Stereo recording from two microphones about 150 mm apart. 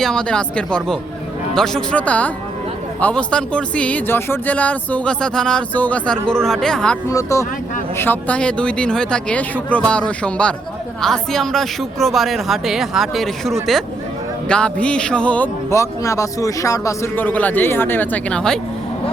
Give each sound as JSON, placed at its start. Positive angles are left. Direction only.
{"t": 0.0, "sound": "speech", "side_deg": 5}
{"t": 7.1, "sound": "speech", "side_deg": 20}
{"t": 15.7, "sound": "speech", "side_deg": 20}